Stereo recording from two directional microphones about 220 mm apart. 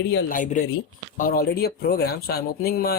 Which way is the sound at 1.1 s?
40° left (ahead or behind).